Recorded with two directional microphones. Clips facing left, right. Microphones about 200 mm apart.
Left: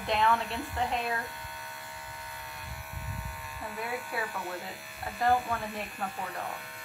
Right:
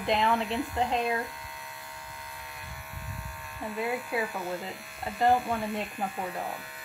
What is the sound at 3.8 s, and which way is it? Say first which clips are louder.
Speech: right 5 dB; 20° right (ahead or behind).